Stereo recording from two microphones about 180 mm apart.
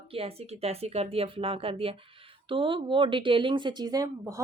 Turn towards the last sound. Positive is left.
turn(degrees=-20)  # may be behind; listen again after turning